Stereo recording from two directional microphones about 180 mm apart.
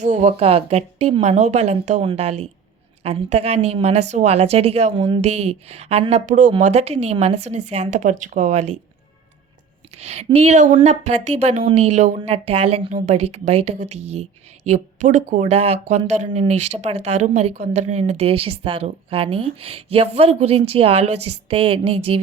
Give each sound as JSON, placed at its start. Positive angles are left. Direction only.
{"t": 0.0, "sound": "speech", "side_deg": -40}
{"t": 4.9, "sound": "a woman's voice", "side_deg": -25}
{"t": 5.2, "sound": "speech", "side_deg": -40}
{"t": 10.0, "sound": "speech", "side_deg": -40}